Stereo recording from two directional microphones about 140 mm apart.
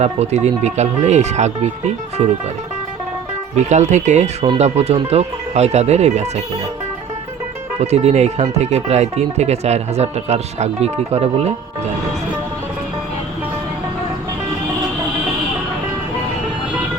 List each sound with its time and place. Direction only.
0.0 s speech: 50° right (ahead or behind)
3.5 s speech: 55° right (ahead or behind)
7.8 s speech: 50° right (ahead or behind)